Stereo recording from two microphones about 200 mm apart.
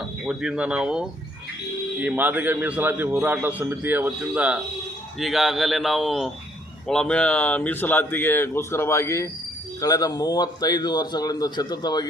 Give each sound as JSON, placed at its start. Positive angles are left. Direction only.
{"t": 0.3, "sound": "a man's voice", "side_deg": -5}